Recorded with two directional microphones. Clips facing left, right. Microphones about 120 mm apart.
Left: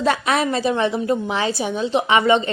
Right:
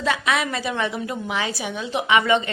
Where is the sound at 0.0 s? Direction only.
40° left (ahead or behind).